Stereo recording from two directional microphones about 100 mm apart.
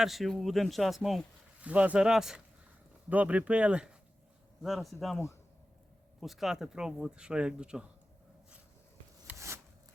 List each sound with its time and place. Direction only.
0.0 s speech: centre (ahead or behind)
1.6 s speech: 15° right (ahead or behind)
5.1 s speech: 30° left (ahead or behind)
6.1 s speech: centre (ahead or behind)
9.3 s a sound: 15° right (ahead or behind)